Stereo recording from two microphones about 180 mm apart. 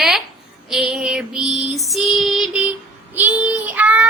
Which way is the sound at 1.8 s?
Centre (ahead or behind).